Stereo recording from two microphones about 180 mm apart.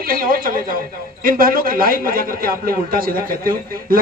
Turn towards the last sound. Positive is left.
turn(degrees=-55)  # may be behind; listen again after turning